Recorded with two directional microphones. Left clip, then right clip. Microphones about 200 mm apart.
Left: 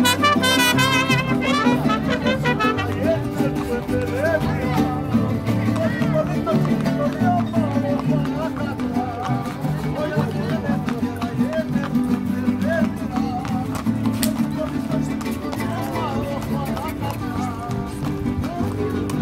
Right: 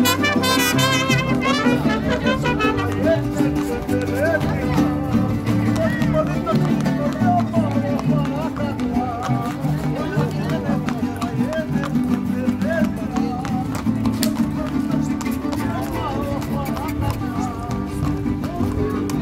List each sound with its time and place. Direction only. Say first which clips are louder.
0.0 s music: left 1 dB; centre (ahead or behind)